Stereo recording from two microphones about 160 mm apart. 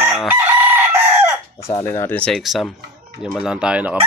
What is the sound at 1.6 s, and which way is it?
Speech, 15° left (ahead or behind).